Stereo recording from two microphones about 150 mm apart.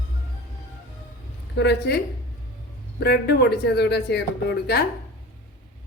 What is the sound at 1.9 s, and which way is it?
Speech, 90° left.